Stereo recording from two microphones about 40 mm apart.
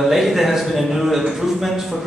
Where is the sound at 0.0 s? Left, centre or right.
Centre.